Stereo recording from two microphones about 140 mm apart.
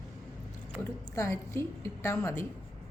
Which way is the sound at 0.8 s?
20° left (ahead or behind).